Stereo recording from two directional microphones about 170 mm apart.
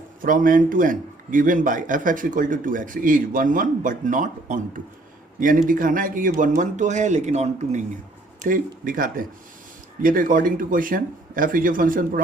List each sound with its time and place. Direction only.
0.2 s a man's voice: 55° right (ahead or behind)
8.4 s a man's voice: 50° right (ahead or behind)